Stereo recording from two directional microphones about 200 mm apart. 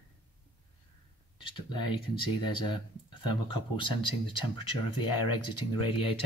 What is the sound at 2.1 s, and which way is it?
Speech, 25° left (ahead or behind).